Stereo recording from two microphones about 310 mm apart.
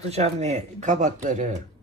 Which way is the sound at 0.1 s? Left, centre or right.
Right.